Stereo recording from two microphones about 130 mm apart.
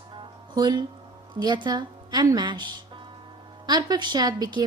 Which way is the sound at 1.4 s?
35° right (ahead or behind).